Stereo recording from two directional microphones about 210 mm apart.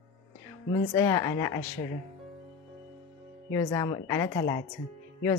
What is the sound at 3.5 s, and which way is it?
A woman's voice, 15° left (ahead or behind).